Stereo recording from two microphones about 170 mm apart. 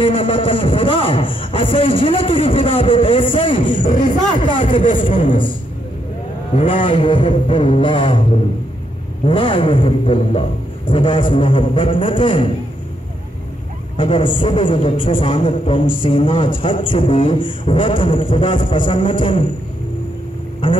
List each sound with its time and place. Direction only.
0.0 s speech: 30° left (ahead or behind)
3.7 s a man's voice: 50° left (ahead or behind)
4.0 s a woman's voice: 30° left (ahead or behind)
5.2 s a man's voice: 50° left (ahead or behind)
6.5 s a woman's voice: 30° left (ahead or behind)
9.2 s a man's voice: 30° left (ahead or behind)
13.9 s a woman's voice: 30° left (ahead or behind)